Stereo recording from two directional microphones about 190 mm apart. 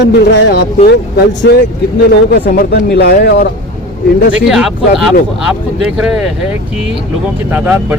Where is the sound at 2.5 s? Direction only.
55° left (ahead or behind).